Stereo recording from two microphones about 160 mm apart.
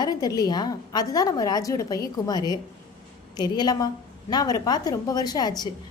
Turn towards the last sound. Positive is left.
turn(degrees=25)  # may be behind; listen again after turning